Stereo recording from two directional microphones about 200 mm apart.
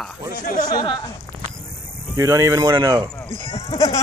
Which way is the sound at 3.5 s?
30° left (ahead or behind).